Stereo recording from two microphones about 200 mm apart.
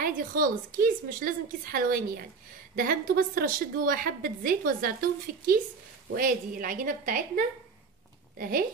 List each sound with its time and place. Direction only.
0.0 s a woman's voice: 45° right (ahead or behind)